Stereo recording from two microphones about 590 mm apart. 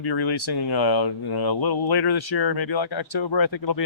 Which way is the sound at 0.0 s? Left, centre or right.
Left.